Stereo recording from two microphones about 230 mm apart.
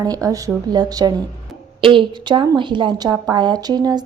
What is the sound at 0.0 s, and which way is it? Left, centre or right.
A woman's voice, centre.